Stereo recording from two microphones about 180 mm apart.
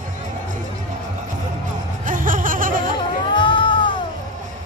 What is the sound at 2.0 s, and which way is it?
Laughter, 50° right (ahead or behind).